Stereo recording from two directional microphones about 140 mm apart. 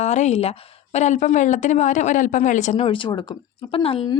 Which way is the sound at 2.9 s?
35° left (ahead or behind).